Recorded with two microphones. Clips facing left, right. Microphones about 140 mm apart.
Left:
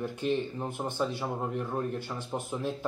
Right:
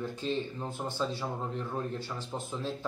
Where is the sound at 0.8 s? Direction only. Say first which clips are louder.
Left 2 dB; 15° left (ahead or behind).